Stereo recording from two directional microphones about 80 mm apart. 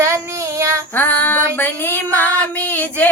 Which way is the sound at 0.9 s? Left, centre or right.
Left.